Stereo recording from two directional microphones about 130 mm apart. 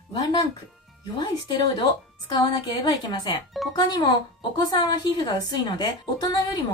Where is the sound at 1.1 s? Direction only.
30° left (ahead or behind).